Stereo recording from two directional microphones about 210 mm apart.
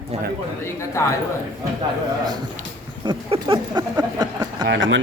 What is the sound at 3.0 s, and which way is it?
Speech, 25° right (ahead or behind).